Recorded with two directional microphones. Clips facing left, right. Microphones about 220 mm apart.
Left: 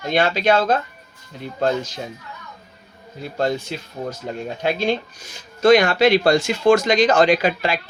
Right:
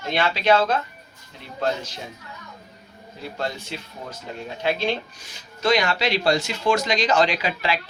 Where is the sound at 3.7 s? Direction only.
45° left (ahead or behind).